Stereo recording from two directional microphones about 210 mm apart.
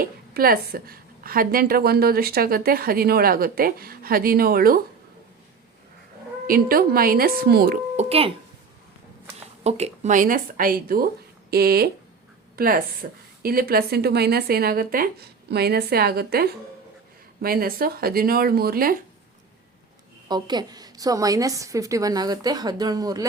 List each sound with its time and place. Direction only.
0.0 s a woman's voice: 45° right (ahead or behind)
6.5 s a woman's voice: 45° right (ahead or behind)
9.6 s a woman's voice: 30° right (ahead or behind)
20.2 s a woman's voice: 20° right (ahead or behind)